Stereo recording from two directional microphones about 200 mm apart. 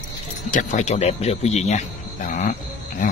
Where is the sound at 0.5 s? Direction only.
35° left (ahead or behind).